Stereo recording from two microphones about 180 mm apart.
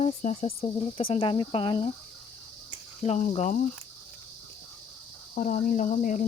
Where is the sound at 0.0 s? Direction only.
35° left (ahead or behind).